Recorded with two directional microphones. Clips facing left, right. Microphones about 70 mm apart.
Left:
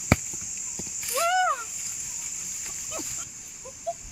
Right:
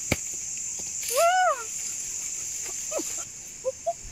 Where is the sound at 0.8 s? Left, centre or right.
Left.